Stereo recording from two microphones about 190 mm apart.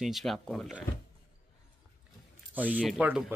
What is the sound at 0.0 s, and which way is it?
Speech, centre (ahead or behind).